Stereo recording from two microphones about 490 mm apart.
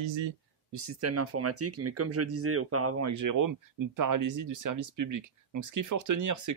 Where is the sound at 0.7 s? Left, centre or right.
Right.